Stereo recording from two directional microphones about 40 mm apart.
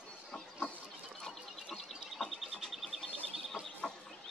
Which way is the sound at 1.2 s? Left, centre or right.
Centre.